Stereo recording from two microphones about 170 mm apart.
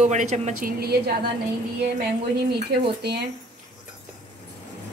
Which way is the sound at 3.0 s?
75° right (ahead or behind).